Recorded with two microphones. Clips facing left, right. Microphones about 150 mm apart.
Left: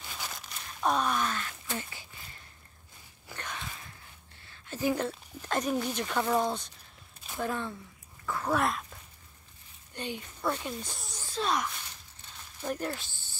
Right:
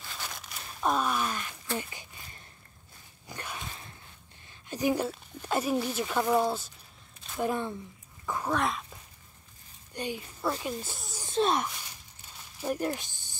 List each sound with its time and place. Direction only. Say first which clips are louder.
0.2 s a sound: right 1 dB; centre (ahead or behind); by 2.0 s 15° right (ahead or behind)
3.3 s dog: right 1 dB; 10° right (ahead or behind)
4.5 s a sound: right 2 dB; 15° right (ahead or behind)
5.0 s speech: right 1 dB; 10° right (ahead or behind)
7.3 s speech: right 3 dB; 15° right (ahead or behind)
8.5 s speech: left 1 dB; centre (ahead or behind)
9.9 s speech: right 2 dB; 10° right (ahead or behind)
11.2 s speech: right 4 dB; 25° right (ahead or behind)
12.2 s a sound: right 2 dB; 10° right (ahead or behind)